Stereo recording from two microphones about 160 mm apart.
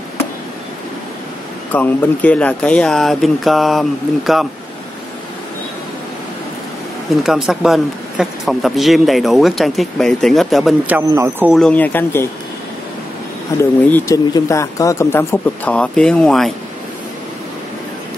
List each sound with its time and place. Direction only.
1.7 s speech: 10° left (ahead or behind)
7.2 s speech: 5° right (ahead or behind)
11.0 s speech: 20° right (ahead or behind)
11.5 s speech: 5° left (ahead or behind)
13.6 s speech: 15° left (ahead or behind)